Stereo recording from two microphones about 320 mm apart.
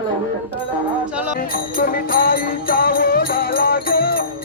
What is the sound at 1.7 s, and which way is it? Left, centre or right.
Music, left.